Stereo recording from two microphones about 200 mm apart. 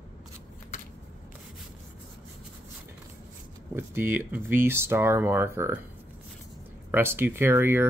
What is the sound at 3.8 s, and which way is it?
Speech, 10° right (ahead or behind).